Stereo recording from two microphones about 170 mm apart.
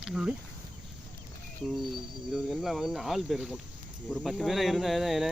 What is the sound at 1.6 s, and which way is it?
Speech, centre (ahead or behind).